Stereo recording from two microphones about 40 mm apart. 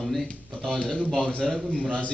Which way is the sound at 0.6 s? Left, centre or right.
Left.